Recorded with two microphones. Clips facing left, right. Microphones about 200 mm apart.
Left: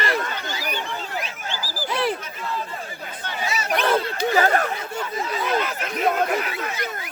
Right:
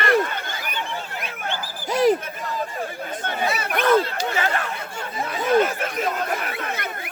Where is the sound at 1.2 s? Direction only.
60° right (ahead or behind).